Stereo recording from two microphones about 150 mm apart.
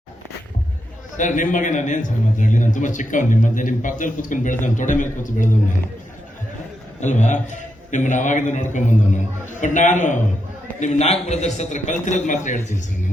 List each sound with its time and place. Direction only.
1.1 s a man's voice: 60° left (ahead or behind)
7.0 s a man's voice: 55° left (ahead or behind)